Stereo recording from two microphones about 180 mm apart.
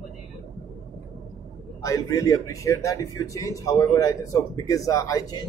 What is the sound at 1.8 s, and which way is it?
A man's voice, 20° left (ahead or behind).